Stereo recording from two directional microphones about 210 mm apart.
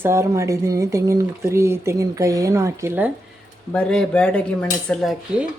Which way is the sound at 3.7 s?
5° left (ahead or behind).